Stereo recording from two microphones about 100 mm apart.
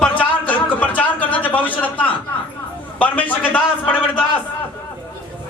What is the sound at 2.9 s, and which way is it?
A man's voice, 15° left (ahead or behind).